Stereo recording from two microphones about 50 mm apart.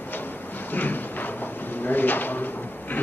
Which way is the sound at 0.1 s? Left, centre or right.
Left.